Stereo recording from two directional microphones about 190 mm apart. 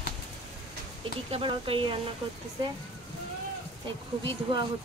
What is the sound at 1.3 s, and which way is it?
Speech, 30° right (ahead or behind).